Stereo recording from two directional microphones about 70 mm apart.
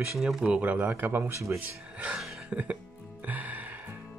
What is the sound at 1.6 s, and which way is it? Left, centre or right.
Speech, right.